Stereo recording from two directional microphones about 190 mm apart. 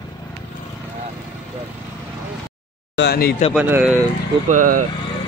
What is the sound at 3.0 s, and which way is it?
Speech, 55° left (ahead or behind).